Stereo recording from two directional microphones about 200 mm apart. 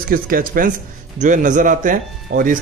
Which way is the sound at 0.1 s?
45° right (ahead or behind).